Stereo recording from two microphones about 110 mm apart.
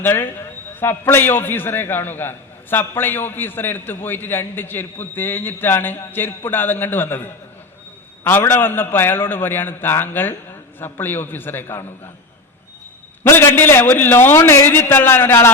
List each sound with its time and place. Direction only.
0.0 s a man's voice: 20° left (ahead or behind)
8.2 s a man's voice: 20° left (ahead or behind)
13.2 s a man's voice: 20° left (ahead or behind)